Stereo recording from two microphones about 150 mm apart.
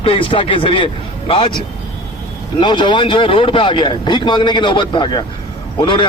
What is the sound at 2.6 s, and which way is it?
A man's voice, 30° left (ahead or behind).